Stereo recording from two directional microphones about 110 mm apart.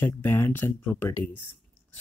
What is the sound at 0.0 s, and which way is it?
Speech, 20° left (ahead or behind).